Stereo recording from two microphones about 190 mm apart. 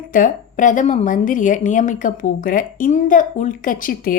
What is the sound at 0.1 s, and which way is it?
A woman's voice, 45° left (ahead or behind).